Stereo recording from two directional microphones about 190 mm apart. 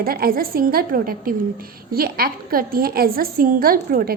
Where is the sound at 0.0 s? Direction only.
50° right (ahead or behind).